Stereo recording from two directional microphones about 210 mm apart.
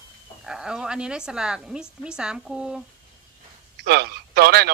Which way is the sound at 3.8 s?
50° right (ahead or behind).